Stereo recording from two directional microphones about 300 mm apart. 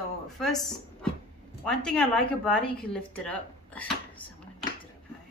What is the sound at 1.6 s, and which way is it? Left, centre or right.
A woman's voice, centre.